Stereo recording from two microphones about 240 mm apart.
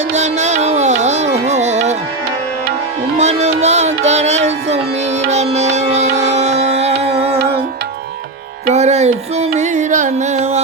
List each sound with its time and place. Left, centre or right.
0.1 s music: right
3.2 s music: right
8.6 s music: right